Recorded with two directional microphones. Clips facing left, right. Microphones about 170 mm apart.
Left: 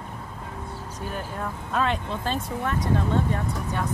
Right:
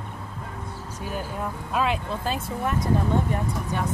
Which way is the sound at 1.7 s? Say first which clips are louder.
Even; 10° right (ahead or behind).